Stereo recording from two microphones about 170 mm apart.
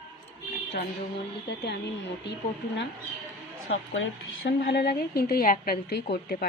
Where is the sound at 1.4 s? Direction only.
85° left.